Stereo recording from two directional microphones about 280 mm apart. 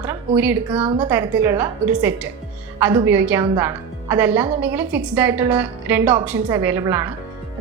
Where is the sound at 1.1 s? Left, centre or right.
Centre.